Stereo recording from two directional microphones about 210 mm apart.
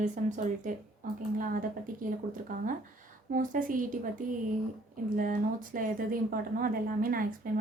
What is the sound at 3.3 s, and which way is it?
A woman's voice, 40° right (ahead or behind).